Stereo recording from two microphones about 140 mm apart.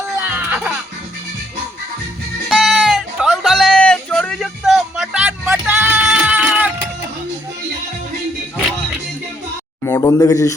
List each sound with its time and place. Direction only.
0.3 s music: 10° right (ahead or behind)
2.5 s music: centre (ahead or behind)
5.5 s music: 15° right (ahead or behind)
9.8 s speech: 20° left (ahead or behind)